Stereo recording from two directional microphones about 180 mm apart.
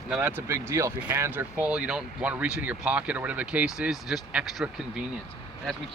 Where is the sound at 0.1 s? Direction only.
10° right (ahead or behind).